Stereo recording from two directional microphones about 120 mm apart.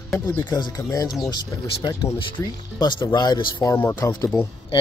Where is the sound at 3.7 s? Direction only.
20° left (ahead or behind).